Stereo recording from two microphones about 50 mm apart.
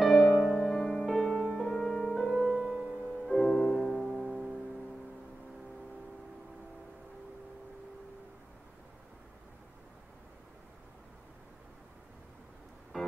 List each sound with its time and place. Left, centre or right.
0.0 s music: centre
0.6 s music: centre
2.3 s music: centre
3.3 s music: centre